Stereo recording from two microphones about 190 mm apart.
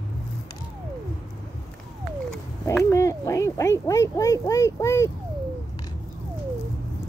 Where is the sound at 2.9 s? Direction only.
15° left (ahead or behind).